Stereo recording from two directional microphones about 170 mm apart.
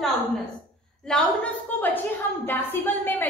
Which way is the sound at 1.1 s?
5° left (ahead or behind).